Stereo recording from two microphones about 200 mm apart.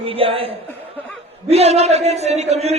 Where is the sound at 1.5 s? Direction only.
30° right (ahead or behind).